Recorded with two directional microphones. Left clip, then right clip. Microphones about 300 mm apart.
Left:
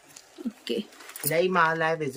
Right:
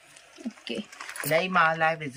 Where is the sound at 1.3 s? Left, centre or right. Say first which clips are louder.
Even; centre.